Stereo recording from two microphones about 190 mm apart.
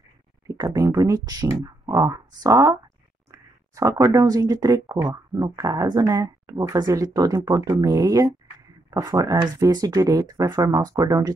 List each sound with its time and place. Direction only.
0.5 s speech: 15° right (ahead or behind)